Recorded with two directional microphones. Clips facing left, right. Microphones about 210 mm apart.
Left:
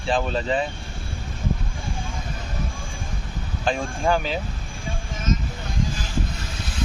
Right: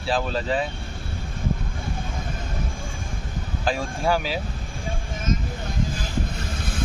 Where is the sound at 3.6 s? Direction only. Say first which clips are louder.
Left 1 dB; 5° right (ahead or behind).